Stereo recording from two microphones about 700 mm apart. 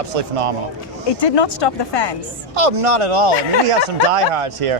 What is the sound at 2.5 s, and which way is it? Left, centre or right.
Speech, right.